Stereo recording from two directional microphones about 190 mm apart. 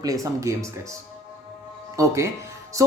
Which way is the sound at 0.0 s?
20° right (ahead or behind).